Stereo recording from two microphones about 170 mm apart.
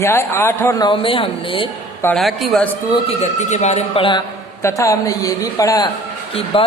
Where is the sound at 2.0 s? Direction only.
Centre (ahead or behind).